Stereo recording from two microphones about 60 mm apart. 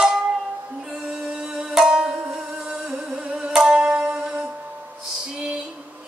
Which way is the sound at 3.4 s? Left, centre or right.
Centre.